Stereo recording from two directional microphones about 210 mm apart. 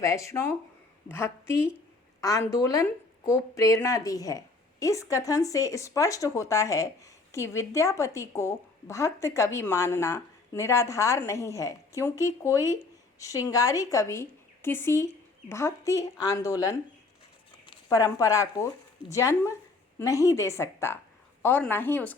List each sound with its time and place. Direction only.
0.0 s speech: 15° left (ahead or behind)
17.8 s speech: 15° left (ahead or behind)